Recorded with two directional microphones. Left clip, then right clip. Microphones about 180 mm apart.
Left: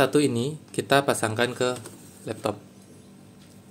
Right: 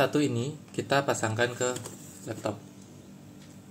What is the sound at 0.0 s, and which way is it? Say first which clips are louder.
Speech: left 5 dB; 40° left (ahead or behind).